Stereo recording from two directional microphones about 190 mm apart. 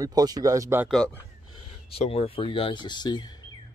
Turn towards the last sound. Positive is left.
turn(degrees=20)  # may be behind; listen again after turning